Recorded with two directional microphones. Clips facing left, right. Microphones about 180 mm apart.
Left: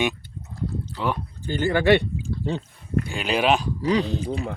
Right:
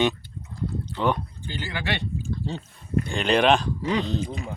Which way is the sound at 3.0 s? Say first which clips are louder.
Right 3 dB; 5° left (ahead or behind).